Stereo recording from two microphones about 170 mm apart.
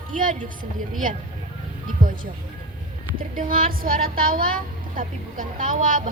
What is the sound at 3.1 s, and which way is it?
A woman's voice, 55° right (ahead or behind).